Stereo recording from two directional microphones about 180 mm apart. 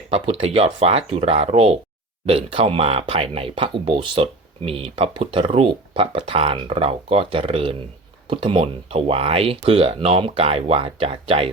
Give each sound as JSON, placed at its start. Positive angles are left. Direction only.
{"t": 0.1, "sound": "speech", "side_deg": -35}